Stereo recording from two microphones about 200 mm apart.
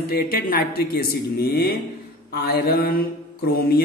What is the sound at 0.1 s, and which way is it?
Speech, 45° left (ahead or behind).